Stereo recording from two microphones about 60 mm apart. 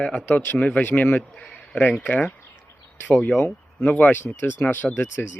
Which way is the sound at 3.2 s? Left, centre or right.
Centre.